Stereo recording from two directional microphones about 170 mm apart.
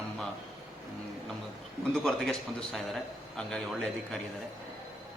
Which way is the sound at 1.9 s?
Centre (ahead or behind).